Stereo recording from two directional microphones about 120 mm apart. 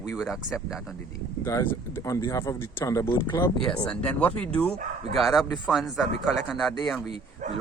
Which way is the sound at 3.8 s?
15° left (ahead or behind).